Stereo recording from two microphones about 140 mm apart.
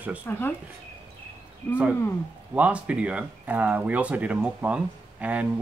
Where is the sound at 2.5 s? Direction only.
10° right (ahead or behind).